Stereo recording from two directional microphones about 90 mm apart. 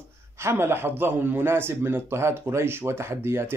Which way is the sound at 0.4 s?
25° right (ahead or behind).